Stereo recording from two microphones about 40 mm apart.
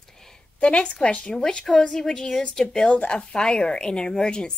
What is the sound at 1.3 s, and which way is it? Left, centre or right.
Speech, centre.